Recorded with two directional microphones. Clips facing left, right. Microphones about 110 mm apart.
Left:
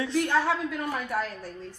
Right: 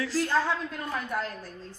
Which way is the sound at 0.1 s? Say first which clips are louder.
Left 2 dB; 65° left (ahead or behind).